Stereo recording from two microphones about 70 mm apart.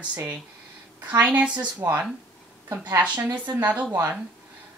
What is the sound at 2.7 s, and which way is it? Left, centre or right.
Speech, right.